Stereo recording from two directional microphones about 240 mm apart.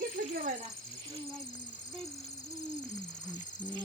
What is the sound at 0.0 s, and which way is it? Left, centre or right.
Snake, right.